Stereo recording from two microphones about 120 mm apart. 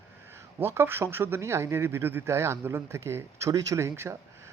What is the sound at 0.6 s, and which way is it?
Speech, 20° right (ahead or behind).